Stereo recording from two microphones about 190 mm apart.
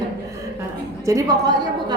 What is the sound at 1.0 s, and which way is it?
Speech, 20° right (ahead or behind).